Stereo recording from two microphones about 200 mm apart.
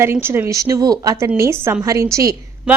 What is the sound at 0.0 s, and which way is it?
A woman's voice, 10° right (ahead or behind).